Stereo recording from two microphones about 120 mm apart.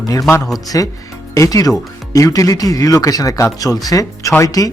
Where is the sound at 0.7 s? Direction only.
30° left (ahead or behind).